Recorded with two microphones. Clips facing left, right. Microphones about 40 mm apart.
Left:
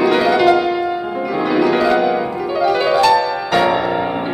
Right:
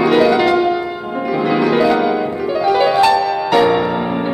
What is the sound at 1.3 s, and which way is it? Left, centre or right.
Music, centre.